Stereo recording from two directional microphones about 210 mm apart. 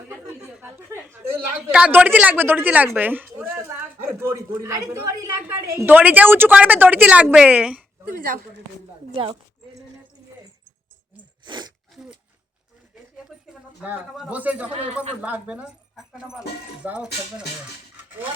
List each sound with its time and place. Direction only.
0.6 s a woman's voice: 10° right (ahead or behind)
9.1 s speech: 20° right (ahead or behind)
11.4 s sneeze: 20° right (ahead or behind)
13.5 s speech: 5° right (ahead or behind)